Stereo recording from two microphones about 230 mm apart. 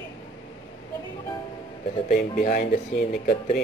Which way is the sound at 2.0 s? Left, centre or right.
Left.